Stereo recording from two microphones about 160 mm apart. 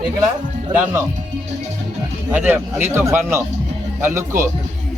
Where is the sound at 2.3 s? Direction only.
10° right (ahead or behind).